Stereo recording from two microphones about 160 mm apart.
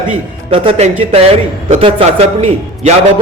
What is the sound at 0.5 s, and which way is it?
A man's voice, 35° right (ahead or behind).